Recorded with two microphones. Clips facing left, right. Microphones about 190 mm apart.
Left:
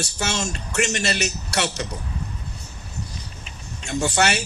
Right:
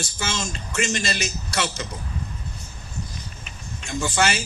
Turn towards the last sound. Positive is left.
turn(degrees=65)  # may be behind; listen again after turning